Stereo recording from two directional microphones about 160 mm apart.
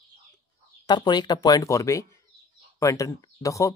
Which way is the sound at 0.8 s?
25° left (ahead or behind).